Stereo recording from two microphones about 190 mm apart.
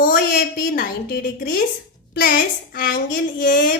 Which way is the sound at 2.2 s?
45° left (ahead or behind).